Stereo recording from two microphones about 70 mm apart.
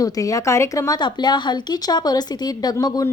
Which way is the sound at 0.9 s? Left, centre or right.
Left.